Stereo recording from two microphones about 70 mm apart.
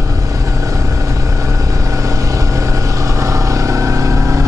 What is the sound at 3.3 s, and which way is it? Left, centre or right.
Vehicle, right.